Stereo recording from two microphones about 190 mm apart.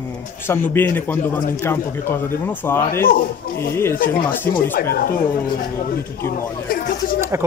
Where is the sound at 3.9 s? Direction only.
50° left (ahead or behind).